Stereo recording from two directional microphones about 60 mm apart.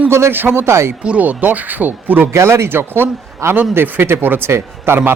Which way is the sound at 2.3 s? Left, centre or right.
Right.